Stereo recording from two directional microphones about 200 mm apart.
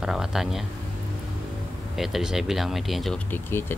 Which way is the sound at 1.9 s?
Centre (ahead or behind).